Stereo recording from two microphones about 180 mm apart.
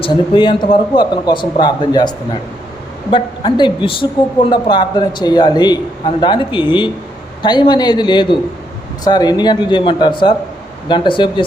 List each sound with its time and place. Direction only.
0.0 s a man's voice: 25° left (ahead or behind)